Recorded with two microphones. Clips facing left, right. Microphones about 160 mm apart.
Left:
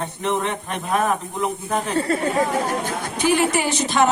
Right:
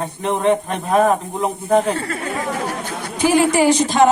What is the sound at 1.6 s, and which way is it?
Speech, 40° right (ahead or behind).